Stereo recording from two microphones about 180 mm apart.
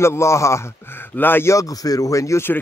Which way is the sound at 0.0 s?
15° left (ahead or behind).